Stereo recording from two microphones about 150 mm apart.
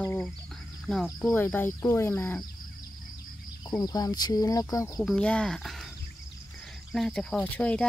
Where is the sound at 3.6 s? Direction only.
25° left (ahead or behind).